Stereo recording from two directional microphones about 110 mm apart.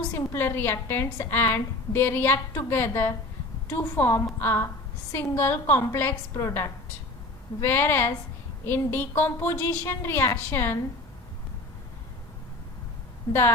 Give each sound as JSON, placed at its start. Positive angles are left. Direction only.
{"t": 0.1, "sound": "a woman's voice", "side_deg": 20}